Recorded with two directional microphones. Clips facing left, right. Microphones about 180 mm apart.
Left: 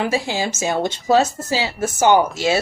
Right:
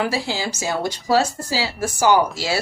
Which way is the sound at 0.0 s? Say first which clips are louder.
Left 2 dB; 20° left (ahead or behind).